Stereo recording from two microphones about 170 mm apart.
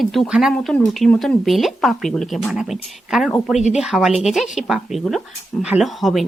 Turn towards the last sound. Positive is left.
turn(degrees=0)  # may be behind; listen again after turning